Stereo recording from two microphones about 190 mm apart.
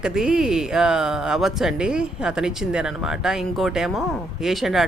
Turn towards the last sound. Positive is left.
turn(degrees=0)  # may be behind; listen again after turning